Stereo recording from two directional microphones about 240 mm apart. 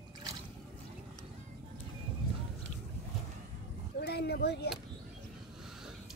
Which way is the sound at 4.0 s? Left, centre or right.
Left.